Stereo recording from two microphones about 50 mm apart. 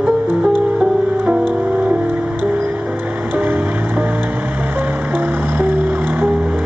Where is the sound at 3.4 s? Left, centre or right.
Right.